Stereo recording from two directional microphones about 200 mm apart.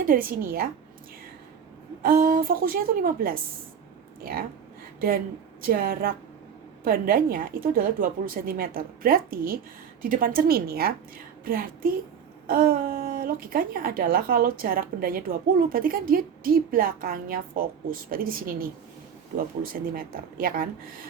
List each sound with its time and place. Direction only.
0.1 s speech: 45° right (ahead or behind)
2.0 s speech: 50° right (ahead or behind)
4.9 s a woman's voice: 45° right (ahead or behind)